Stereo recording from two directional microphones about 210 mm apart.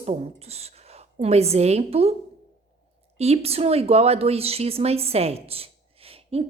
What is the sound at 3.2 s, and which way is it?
Speech, 30° right (ahead or behind).